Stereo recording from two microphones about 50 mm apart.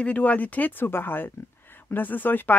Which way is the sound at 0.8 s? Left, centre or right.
Left.